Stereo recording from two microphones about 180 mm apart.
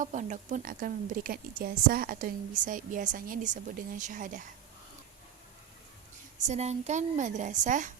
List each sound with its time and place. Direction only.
0.0 s a woman's voice: 45° right (ahead or behind)
6.5 s a woman's voice: 40° right (ahead or behind)